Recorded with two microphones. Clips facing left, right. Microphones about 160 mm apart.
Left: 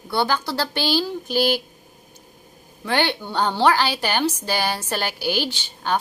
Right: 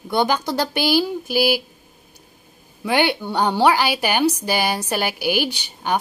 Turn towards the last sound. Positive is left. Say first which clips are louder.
# right 2 dB
turn(degrees=-15)  # may be behind; listen again after turning